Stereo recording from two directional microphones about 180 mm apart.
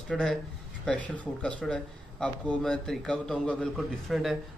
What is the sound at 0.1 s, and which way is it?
Speech, centre (ahead or behind).